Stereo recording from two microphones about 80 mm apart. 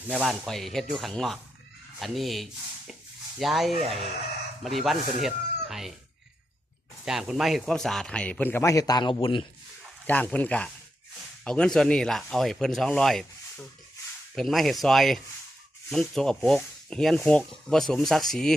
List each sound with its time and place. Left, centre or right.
0.3 s speech: centre
7.0 s a man's voice: centre; by 8.6 s left
8.6 s speech: left
10.1 s speech: centre